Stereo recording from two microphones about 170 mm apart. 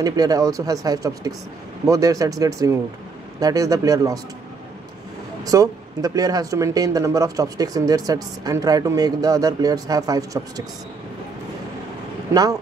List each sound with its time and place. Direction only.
0.0 s speech: 20° right (ahead or behind)
5.4 s speech: 20° right (ahead or behind)